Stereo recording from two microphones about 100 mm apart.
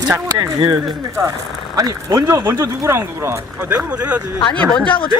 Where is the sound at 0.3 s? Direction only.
45° right (ahead or behind).